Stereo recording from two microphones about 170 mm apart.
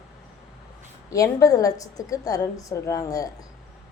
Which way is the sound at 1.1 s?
20° left (ahead or behind).